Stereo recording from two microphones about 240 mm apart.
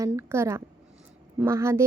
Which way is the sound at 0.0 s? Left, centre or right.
Centre.